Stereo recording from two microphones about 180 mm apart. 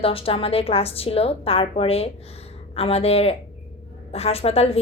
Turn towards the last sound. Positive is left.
turn(degrees=35)  # may be behind; listen again after turning